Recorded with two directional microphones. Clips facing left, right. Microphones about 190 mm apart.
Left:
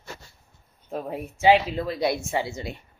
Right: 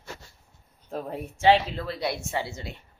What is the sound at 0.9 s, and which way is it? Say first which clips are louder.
A woman's voice: left 2 dB; 5° left (ahead or behind).